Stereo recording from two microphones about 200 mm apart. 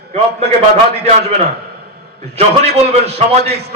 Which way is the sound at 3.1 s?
55° right (ahead or behind).